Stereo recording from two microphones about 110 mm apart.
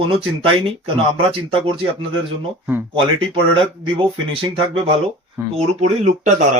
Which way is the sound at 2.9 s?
50° right (ahead or behind).